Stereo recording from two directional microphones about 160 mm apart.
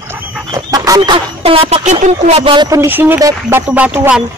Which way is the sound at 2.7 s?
15° right (ahead or behind).